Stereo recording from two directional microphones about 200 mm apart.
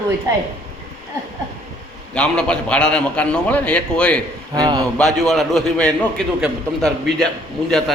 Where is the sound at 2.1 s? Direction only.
5° left (ahead or behind).